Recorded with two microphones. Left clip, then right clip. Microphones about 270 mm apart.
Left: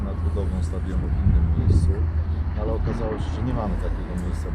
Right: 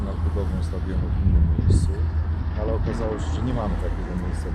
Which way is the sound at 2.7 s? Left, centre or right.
Centre.